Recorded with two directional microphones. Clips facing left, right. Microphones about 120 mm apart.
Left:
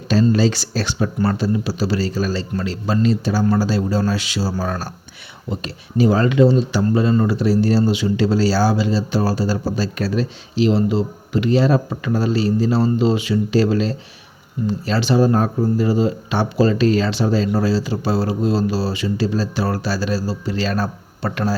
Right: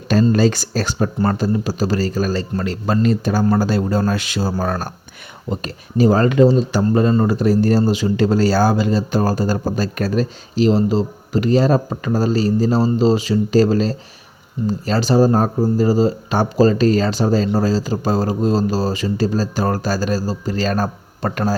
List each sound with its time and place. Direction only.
0.3 s speech: 50° right (ahead or behind)